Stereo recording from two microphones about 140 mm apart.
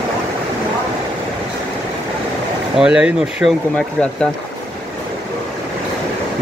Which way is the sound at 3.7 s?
5° left (ahead or behind).